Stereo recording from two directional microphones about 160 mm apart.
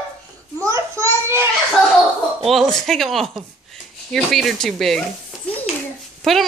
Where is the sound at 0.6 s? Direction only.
20° right (ahead or behind).